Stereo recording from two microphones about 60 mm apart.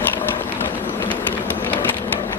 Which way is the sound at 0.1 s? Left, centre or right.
Left.